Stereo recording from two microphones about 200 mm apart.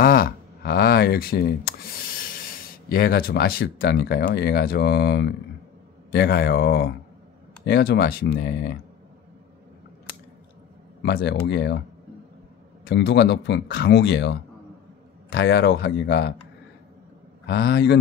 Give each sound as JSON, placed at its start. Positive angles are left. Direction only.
{"t": 0.0, "sound": "speech", "side_deg": 50}
{"t": 11.0, "sound": "speech", "side_deg": 55}
{"t": 12.8, "sound": "speech", "side_deg": 55}
{"t": 17.5, "sound": "speech", "side_deg": 55}